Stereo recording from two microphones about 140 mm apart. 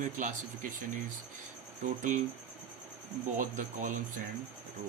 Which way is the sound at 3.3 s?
65° right (ahead or behind).